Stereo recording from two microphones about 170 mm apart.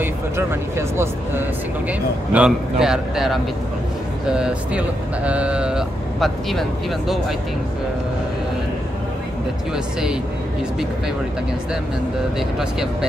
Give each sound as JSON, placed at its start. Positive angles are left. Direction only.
{"t": 0.0, "sound": "speech", "side_deg": -15}